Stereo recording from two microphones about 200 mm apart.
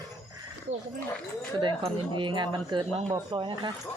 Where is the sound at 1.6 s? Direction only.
25° right (ahead or behind).